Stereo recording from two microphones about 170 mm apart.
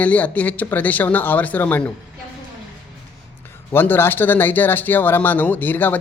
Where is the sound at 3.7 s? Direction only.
15° left (ahead or behind).